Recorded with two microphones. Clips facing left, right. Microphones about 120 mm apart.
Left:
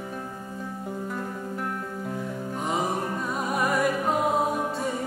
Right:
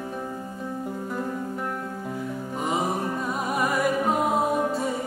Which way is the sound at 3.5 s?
Centre (ahead or behind).